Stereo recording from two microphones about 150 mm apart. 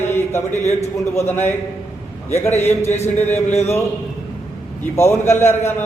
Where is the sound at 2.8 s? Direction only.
45° left (ahead or behind).